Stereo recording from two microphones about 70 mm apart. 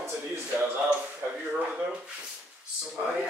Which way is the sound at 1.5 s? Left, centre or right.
Centre.